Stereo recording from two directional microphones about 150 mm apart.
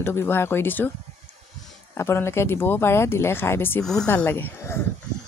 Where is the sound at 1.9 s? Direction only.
15° left (ahead or behind).